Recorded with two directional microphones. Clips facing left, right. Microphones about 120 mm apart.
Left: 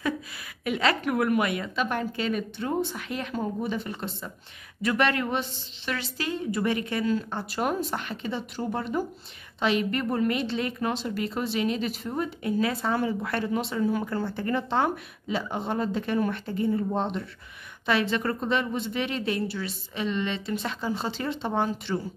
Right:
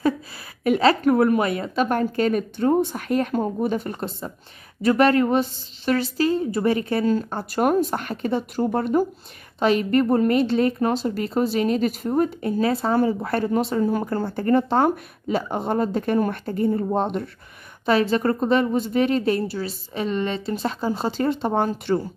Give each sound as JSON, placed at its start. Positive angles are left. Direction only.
{"t": 0.7, "sound": "a woman's voice", "side_deg": -40}